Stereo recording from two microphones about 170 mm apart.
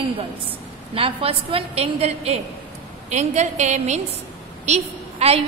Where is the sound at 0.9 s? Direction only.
35° right (ahead or behind).